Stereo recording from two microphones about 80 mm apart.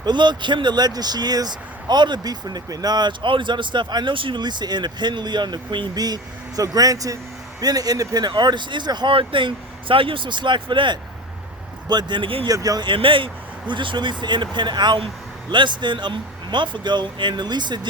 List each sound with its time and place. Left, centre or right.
0.0 s speech: right
6.6 s speech: right
8.3 s speech: right
11.9 s speech: right
12.5 s speech: right
12.8 s speech: right